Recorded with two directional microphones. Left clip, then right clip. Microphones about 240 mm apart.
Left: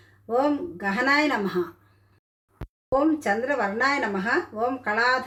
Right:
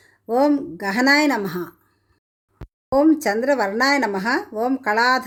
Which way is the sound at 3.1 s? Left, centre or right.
Right.